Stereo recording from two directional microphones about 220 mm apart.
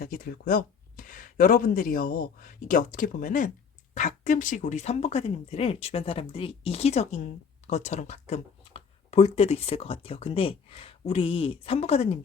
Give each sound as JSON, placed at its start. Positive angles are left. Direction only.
{"t": 0.0, "sound": "speech", "side_deg": 40}